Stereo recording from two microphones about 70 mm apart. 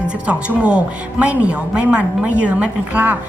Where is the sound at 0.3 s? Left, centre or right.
Centre.